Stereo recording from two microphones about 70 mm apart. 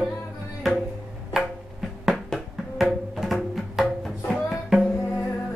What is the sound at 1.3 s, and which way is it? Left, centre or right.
Music, centre.